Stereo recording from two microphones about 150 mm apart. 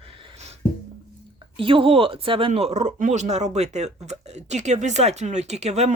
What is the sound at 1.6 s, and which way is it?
Speech, 35° right (ahead or behind).